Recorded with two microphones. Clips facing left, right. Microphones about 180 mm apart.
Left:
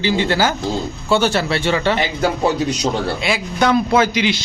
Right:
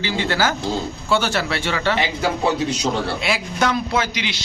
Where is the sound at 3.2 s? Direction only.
Centre (ahead or behind).